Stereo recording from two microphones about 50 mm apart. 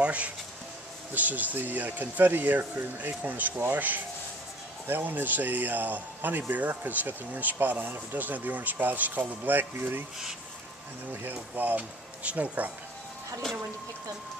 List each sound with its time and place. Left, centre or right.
0.0 s a sound: right
1.1 s speech: right
11.5 s speech: right